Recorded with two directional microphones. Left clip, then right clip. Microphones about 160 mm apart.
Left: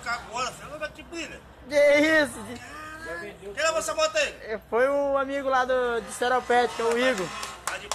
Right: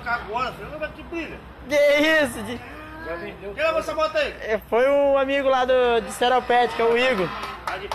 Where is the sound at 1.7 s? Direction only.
Centre (ahead or behind).